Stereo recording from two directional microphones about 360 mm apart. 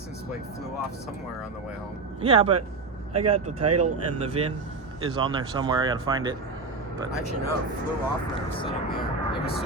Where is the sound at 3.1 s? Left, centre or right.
Right.